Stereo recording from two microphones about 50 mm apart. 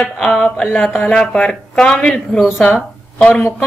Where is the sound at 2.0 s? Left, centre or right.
Left.